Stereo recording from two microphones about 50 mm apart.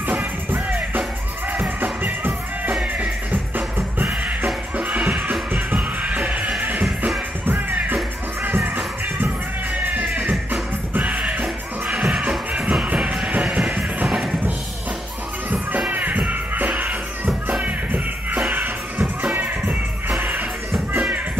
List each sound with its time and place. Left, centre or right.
0.0 s music: right
7.4 s music: right
10.5 s music: right
11.4 s music: centre
15.9 s music: right